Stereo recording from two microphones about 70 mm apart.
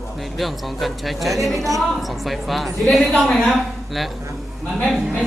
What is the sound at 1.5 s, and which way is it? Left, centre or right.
Speech, right.